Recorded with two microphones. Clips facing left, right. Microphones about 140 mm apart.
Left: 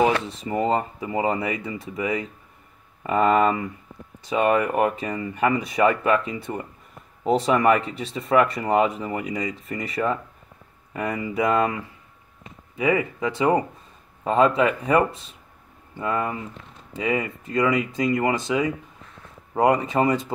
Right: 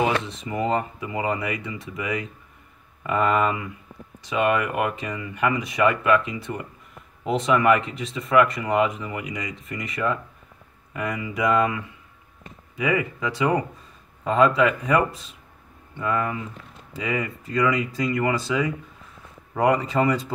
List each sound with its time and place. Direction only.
0.4 s speech: 35° left (ahead or behind)